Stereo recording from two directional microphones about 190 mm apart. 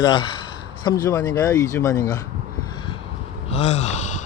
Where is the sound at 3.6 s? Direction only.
35° left (ahead or behind).